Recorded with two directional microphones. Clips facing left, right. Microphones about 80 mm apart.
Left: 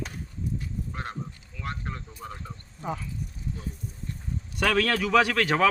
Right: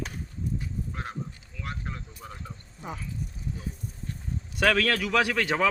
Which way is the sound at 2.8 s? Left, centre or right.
Centre.